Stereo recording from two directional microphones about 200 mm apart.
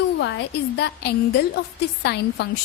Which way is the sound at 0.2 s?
60° left (ahead or behind).